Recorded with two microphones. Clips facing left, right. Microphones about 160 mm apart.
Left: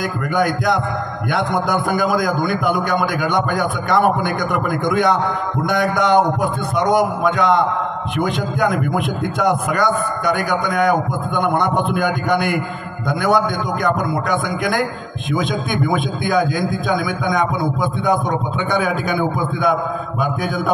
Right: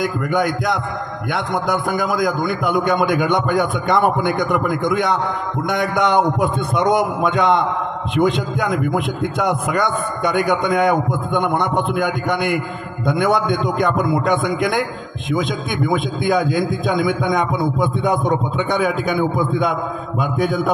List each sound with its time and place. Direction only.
0.0 s a man's voice: 20° right (ahead or behind)
20.2 s a man's voice: 25° right (ahead or behind)